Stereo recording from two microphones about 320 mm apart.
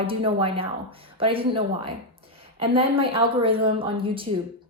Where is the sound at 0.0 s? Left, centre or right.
Centre.